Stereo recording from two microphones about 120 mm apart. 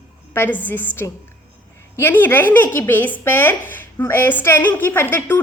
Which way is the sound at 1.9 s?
20° left (ahead or behind).